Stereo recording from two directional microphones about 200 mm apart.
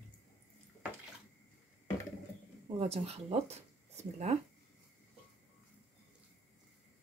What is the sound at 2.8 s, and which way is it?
Speech, 30° right (ahead or behind).